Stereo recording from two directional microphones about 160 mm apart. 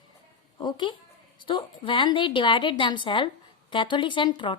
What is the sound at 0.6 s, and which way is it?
A woman's voice, 30° left (ahead or behind).